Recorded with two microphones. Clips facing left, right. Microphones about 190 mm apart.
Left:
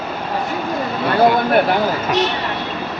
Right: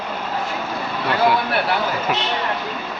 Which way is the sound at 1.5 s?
45° left (ahead or behind).